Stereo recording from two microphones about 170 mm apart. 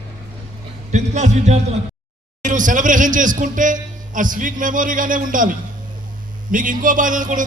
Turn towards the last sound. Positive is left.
turn(degrees=-50)  # may be behind; listen again after turning